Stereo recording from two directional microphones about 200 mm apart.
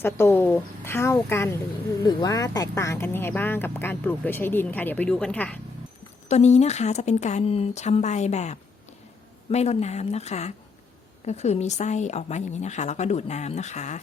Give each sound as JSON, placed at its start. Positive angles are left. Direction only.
{"t": 0.0, "sound": "speech", "side_deg": 10}
{"t": 6.2, "sound": "a woman's voice", "side_deg": 35}